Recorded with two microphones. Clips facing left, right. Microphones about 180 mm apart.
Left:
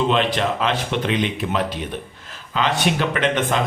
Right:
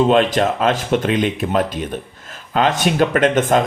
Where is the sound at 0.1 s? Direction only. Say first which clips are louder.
Right 5 dB; 45° right (ahead or behind).